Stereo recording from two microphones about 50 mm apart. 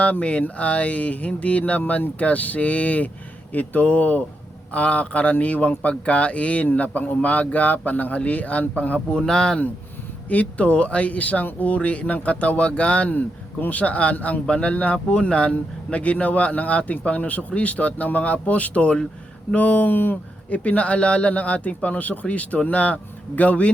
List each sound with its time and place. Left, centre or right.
0.0 s speech: left
9.1 s speech: centre
10.2 s speech: left
20.5 s speech: left